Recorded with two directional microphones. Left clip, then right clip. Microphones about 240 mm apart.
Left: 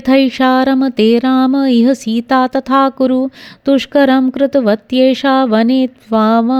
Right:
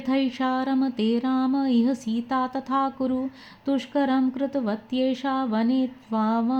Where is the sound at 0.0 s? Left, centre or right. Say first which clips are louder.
Left 14 dB; left.